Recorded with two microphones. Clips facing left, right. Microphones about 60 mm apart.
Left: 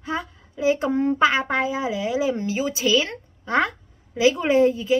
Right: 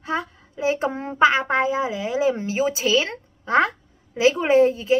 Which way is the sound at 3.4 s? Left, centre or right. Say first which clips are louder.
Right 3 dB; centre.